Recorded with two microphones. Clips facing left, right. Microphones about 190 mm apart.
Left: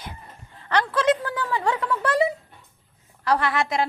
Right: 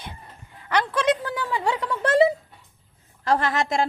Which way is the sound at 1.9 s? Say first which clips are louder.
Right 5 dB; 25° right (ahead or behind).